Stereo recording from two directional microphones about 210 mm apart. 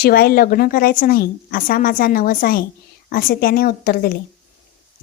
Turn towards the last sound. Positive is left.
turn(degrees=45)  # may be behind; listen again after turning